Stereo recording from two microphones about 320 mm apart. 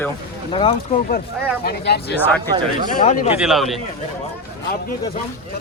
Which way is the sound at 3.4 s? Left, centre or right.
Centre.